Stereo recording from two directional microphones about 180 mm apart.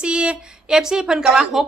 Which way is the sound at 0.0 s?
5° right (ahead or behind).